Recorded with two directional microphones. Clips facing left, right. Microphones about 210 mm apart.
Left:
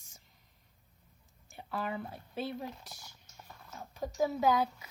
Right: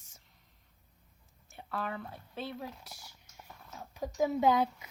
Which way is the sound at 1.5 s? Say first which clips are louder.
Left 1 dB; 5° left (ahead or behind).